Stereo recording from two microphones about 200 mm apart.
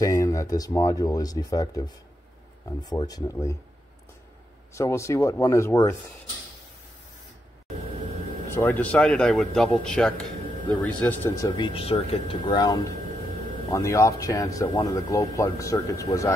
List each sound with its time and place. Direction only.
0.0 s speech: 15° left (ahead or behind)
4.7 s speech: 15° left (ahead or behind)
8.5 s speech: 10° left (ahead or behind)